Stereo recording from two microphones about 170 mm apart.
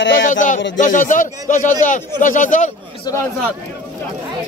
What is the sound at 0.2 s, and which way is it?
Speech, 50° left (ahead or behind).